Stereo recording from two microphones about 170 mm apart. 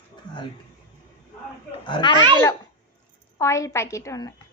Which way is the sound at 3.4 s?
15° left (ahead or behind).